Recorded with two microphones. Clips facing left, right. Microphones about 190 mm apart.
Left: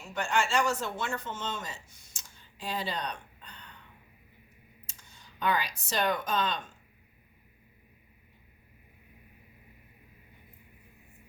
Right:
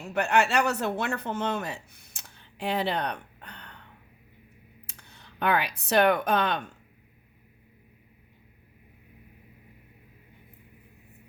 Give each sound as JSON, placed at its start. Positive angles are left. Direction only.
{"t": 0.0, "sound": "speech", "side_deg": -65}
{"t": 4.9, "sound": "speech", "side_deg": -60}